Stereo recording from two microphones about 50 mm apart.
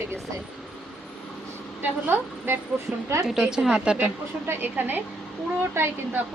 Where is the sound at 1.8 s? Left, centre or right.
Right.